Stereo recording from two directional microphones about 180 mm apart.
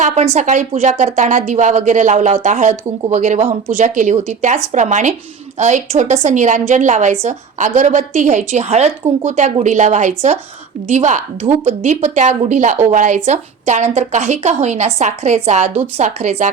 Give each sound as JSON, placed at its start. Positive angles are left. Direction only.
{"t": 0.0, "sound": "a woman's voice", "side_deg": -40}